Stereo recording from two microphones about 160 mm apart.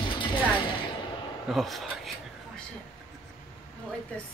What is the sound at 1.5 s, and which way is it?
Speech, centre (ahead or behind).